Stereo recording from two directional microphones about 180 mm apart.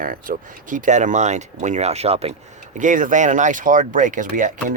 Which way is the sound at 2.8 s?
45° right (ahead or behind).